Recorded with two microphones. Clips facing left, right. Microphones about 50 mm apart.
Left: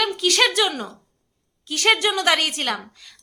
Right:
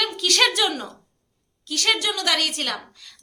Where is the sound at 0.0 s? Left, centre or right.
Centre.